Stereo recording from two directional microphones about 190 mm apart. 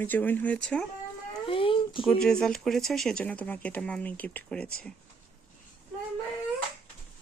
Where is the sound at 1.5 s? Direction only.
25° left (ahead or behind).